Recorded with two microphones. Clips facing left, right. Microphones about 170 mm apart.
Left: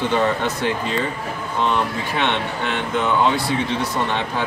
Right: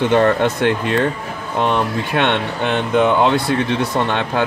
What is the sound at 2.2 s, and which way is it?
Speech, 60° right (ahead or behind).